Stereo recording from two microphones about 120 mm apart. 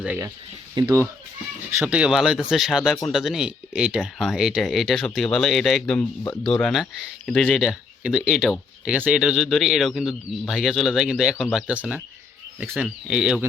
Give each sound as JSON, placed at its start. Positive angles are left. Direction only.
{"t": 0.8, "sound": "speech", "side_deg": -35}
{"t": 1.8, "sound": "speech", "side_deg": -10}